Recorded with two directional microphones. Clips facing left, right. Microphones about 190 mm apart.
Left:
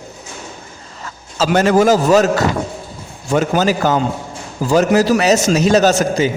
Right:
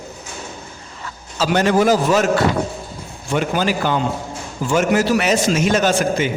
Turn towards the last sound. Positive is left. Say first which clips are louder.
# left 4 dB
turn(degrees=35)  # may be behind; listen again after turning